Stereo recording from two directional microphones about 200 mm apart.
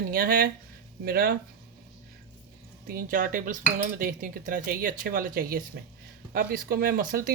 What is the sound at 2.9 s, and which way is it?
Cutlery, 45° right (ahead or behind).